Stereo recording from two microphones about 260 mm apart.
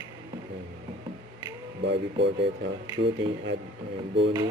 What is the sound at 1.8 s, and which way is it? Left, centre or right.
Speech, right.